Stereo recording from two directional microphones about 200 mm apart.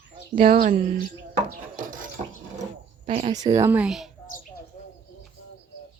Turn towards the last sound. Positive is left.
turn(degrees=0)  # may be behind; listen again after turning